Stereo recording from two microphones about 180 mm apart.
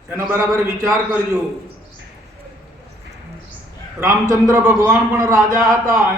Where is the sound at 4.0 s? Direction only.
15° right (ahead or behind).